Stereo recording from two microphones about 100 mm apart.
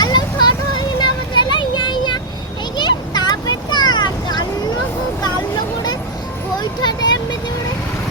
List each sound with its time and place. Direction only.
0.0 s vehicle: 45° left (ahead or behind)
6.6 s vehicle: 45° left (ahead or behind)